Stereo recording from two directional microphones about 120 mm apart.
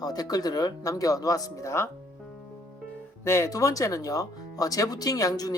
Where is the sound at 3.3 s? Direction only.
25° left (ahead or behind).